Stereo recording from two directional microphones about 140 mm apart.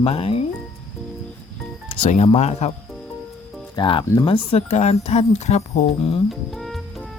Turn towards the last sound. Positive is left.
turn(degrees=0)  # may be behind; listen again after turning